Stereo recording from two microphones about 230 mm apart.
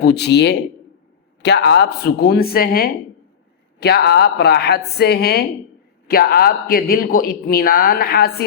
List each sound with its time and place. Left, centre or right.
0.0 s a woman's voice: left